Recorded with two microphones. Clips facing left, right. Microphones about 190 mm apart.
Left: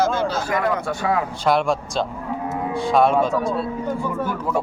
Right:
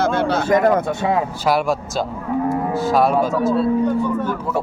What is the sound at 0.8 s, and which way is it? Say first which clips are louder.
Speech: right 3 dB; 25° right (ahead or behind).